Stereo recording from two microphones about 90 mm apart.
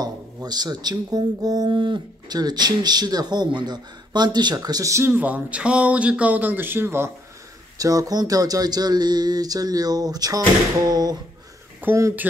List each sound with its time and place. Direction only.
0.0 s speech: 50° right (ahead or behind)
5.1 s speech: 15° right (ahead or behind)
7.7 s speech: 40° right (ahead or behind)
11.8 s speech: 25° right (ahead or behind)